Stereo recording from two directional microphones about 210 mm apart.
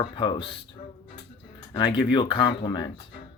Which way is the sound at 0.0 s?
20° left (ahead or behind).